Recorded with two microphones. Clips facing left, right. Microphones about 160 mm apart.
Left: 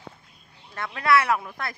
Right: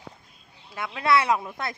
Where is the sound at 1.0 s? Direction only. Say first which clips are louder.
Even; 25° right (ahead or behind).